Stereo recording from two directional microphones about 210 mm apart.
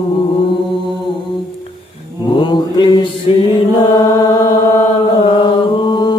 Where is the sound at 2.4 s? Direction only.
20° left (ahead or behind).